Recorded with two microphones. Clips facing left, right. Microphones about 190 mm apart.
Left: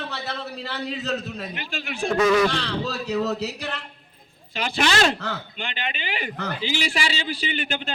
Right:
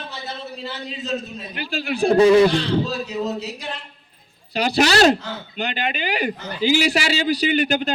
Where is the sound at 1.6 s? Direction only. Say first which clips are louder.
Right 10 dB; 35° right (ahead or behind).